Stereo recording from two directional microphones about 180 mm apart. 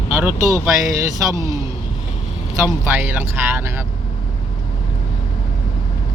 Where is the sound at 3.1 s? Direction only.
10° right (ahead or behind).